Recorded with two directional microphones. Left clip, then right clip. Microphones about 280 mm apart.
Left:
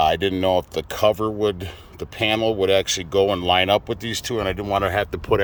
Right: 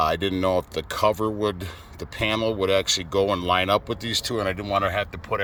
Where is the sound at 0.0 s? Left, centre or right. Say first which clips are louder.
Left 4 dB; centre.